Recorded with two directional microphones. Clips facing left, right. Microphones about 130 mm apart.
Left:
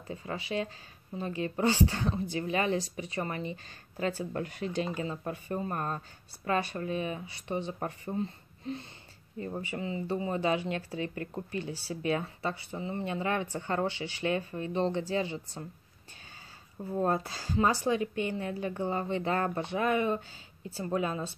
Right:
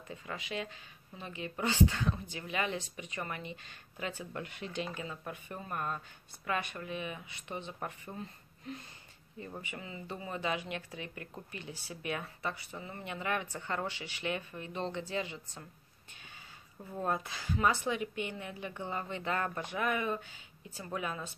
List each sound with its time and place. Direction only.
0.1 s speech: 30° left (ahead or behind)
16.9 s speech: 35° left (ahead or behind)